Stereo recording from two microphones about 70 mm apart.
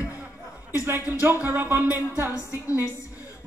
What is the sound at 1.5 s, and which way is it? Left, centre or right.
Music, right.